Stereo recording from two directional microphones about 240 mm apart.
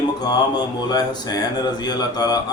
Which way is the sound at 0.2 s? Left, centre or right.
Centre.